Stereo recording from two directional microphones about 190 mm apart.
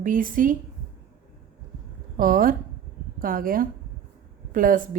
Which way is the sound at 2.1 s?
45° right (ahead or behind).